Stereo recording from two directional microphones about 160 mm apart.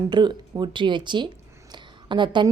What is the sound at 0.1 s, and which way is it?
Speech, 30° right (ahead or behind).